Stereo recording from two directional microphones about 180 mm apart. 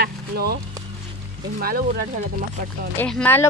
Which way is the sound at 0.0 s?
60° right (ahead or behind).